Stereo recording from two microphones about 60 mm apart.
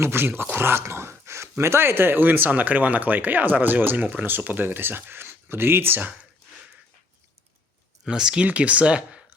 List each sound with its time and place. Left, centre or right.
0.0 s speech: right
8.0 s speech: centre